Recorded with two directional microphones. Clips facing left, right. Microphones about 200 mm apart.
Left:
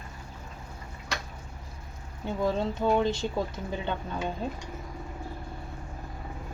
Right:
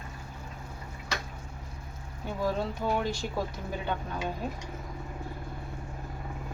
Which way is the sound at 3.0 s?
25° left (ahead or behind).